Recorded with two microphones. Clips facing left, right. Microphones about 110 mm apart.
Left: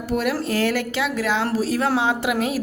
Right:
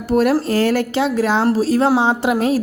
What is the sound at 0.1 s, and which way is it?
A woman's voice, 40° right (ahead or behind).